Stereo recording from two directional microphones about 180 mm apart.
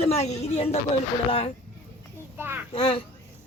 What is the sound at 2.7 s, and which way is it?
Speech, 30° left (ahead or behind).